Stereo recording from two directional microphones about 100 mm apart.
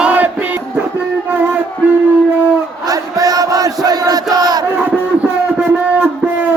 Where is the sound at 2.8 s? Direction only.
35° right (ahead or behind).